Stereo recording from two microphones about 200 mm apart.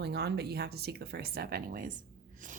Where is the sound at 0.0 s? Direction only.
55° right (ahead or behind).